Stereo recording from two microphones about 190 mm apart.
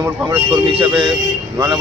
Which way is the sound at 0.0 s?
15° right (ahead or behind).